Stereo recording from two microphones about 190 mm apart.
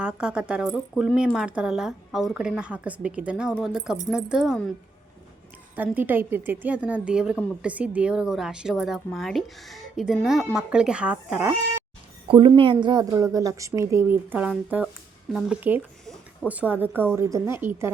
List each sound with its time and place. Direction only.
0.0 s a woman's voice: 5° right (ahead or behind)
5.7 s a woman's voice: 10° right (ahead or behind)
12.3 s a woman's voice: 25° right (ahead or behind)